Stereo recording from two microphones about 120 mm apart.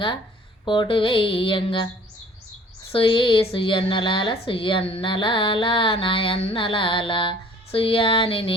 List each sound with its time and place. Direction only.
0.6 s speech: 40° left (ahead or behind)
2.9 s speech: 45° left (ahead or behind)